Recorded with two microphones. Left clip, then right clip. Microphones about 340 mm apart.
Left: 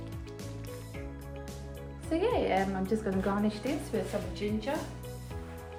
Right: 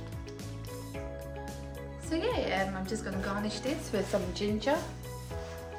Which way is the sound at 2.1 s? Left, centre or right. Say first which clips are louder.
Left 2 dB; centre.